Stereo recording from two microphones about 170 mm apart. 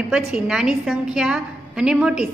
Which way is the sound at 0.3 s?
5° right (ahead or behind).